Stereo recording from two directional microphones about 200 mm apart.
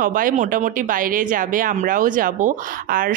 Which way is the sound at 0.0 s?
45° right (ahead or behind).